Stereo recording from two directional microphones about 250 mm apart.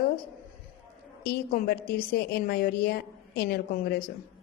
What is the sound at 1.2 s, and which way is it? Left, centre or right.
A woman's voice, left.